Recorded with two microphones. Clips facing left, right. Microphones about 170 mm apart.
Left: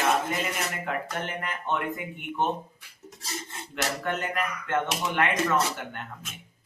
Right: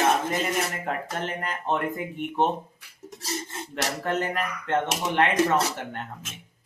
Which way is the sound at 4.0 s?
35° right (ahead or behind).